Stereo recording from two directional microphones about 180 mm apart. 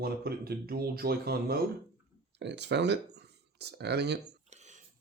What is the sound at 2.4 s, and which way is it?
Speech, 75° right (ahead or behind).